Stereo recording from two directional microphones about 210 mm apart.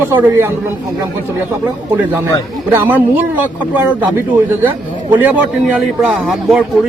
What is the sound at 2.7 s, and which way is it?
A man's voice, 10° right (ahead or behind).